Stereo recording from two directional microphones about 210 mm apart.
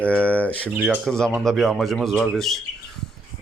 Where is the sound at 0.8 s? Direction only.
5° right (ahead or behind).